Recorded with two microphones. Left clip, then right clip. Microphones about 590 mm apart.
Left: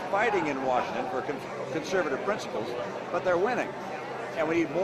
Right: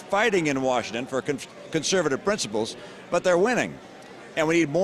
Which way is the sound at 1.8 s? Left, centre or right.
Right.